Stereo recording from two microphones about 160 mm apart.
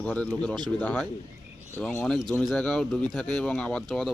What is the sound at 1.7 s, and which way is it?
Speech, 15° left (ahead or behind).